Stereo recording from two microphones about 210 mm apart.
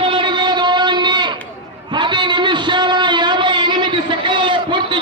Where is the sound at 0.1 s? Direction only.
20° right (ahead or behind).